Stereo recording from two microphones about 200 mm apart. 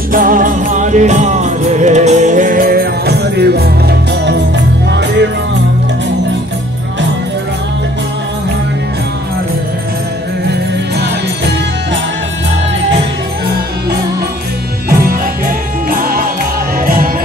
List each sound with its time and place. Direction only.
0.1 s music: 45° right (ahead or behind); by 5.0 s 60° right (ahead or behind)
15.9 s music: 45° right (ahead or behind)